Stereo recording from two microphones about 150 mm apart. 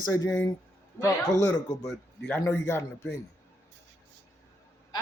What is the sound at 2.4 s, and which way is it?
Speech, 15° left (ahead or behind).